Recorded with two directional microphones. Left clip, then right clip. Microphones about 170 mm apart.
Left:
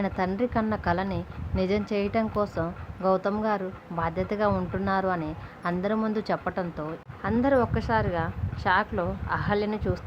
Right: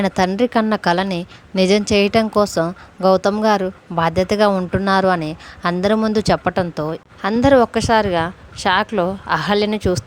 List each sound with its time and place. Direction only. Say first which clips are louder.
0.0 s a woman's voice: right 10 dB; 55° right (ahead or behind)